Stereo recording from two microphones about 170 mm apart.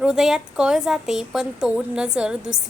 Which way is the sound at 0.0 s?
5° right (ahead or behind).